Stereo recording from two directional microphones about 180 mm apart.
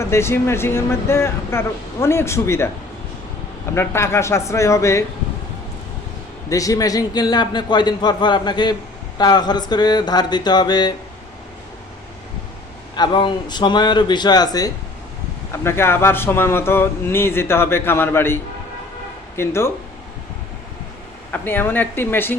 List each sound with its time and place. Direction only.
0.0 s speech: 15° left (ahead or behind)
3.8 s speech: 15° left (ahead or behind)
6.5 s a man's voice: 20° left (ahead or behind)
13.0 s a man's voice: 25° left (ahead or behind)
19.4 s speech: 15° left (ahead or behind)
21.3 s speech: 10° left (ahead or behind)